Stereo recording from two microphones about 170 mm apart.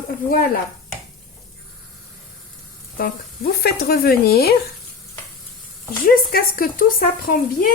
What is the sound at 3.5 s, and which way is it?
A woman's voice, 65° left (ahead or behind).